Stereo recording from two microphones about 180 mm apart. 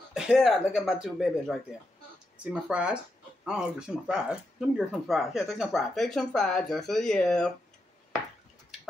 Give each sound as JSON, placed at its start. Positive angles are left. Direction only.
{"t": 0.1, "sound": "speech", "side_deg": -5}